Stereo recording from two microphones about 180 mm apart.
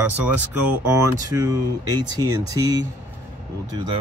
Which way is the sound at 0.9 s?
15° right (ahead or behind).